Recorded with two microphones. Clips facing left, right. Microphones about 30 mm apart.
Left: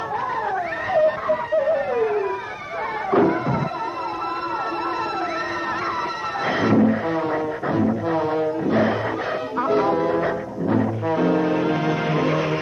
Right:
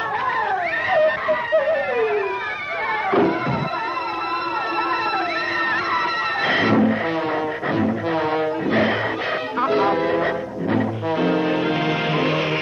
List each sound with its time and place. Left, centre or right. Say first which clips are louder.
0.9 s music: even; right
3.1 s music: left 1 dB; right
6.4 s music: right 1 dB; right
9.6 s music: right 1 dB; right